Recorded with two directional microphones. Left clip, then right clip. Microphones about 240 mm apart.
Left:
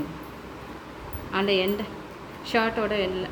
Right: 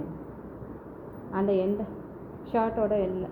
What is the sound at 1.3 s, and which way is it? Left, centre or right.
Speech, left.